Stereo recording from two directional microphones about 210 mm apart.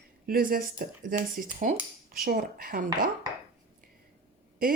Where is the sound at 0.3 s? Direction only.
45° right (ahead or behind).